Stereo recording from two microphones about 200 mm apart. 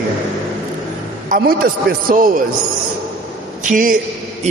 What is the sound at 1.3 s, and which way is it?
A man's voice, 45° right (ahead or behind).